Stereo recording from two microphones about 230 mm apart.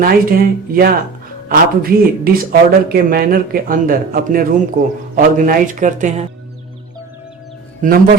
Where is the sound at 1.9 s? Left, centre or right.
Right.